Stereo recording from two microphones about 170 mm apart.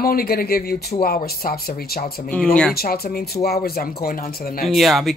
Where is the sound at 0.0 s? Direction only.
60° left (ahead or behind).